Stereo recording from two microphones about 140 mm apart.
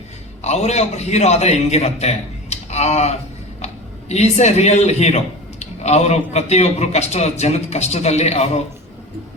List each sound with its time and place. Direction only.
0.4 s a man's voice: 50° left (ahead or behind)